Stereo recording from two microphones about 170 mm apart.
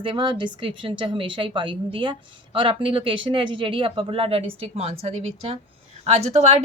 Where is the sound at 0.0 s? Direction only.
30° right (ahead or behind).